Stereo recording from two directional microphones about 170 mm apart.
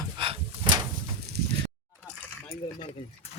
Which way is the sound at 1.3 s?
70° right (ahead or behind).